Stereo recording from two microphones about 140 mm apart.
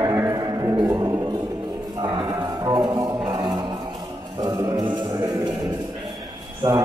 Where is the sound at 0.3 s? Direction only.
25° right (ahead or behind).